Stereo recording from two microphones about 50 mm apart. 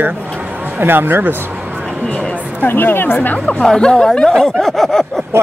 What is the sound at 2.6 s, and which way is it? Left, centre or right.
Speech, left.